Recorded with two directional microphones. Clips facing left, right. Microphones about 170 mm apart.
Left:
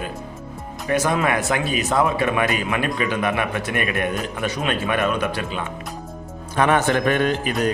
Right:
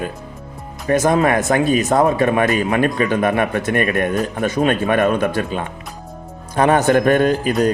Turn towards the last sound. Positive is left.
turn(degrees=-40)  # may be behind; listen again after turning